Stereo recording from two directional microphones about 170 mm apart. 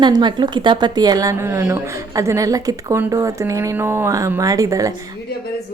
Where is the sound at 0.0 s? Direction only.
25° right (ahead or behind).